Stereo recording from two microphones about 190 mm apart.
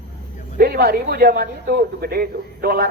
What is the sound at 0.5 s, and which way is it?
A man's voice, 50° right (ahead or behind).